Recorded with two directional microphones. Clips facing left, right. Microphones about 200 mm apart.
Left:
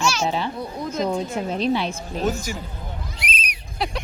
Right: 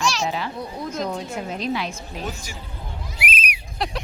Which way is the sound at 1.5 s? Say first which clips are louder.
Left 5 dB; 30° left (ahead or behind).